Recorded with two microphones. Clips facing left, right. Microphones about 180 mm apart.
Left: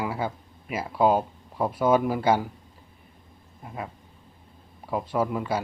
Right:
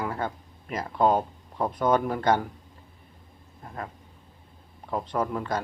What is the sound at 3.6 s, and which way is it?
Speech, 5° left (ahead or behind).